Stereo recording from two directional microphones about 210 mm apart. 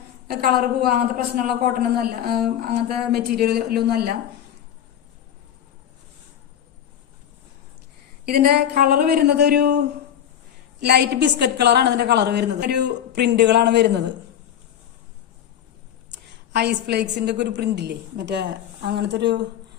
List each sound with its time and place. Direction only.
0.3 s a woman's voice: 45° right (ahead or behind)
8.2 s a woman's voice: 50° right (ahead or behind)
16.6 s a woman's voice: 50° right (ahead or behind)